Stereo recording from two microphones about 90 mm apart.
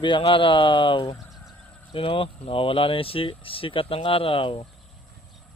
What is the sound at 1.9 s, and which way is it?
Speech, 75° left (ahead or behind).